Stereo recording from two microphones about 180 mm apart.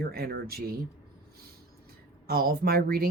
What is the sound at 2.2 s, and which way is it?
Speech, 55° right (ahead or behind).